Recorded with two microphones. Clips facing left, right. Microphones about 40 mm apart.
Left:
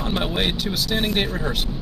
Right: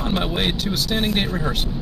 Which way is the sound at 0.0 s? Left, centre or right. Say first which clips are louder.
Right 1 dB; centre.